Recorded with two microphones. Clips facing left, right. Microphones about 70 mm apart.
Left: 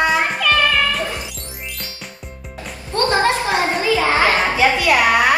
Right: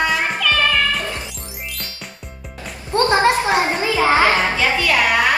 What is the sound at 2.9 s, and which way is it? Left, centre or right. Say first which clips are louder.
Children playing: right 2 dB; right.